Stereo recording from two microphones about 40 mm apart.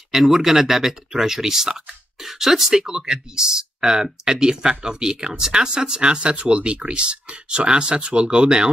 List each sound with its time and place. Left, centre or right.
0.1 s speech: centre